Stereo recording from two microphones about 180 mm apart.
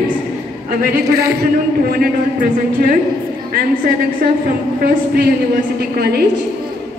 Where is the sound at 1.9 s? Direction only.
55° right (ahead or behind).